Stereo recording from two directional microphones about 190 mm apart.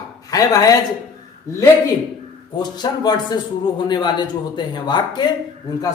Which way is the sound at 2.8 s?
20° left (ahead or behind).